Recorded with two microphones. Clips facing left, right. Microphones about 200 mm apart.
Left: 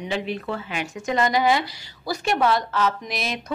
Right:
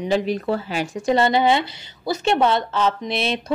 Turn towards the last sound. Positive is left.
turn(degrees=-30)  # may be behind; listen again after turning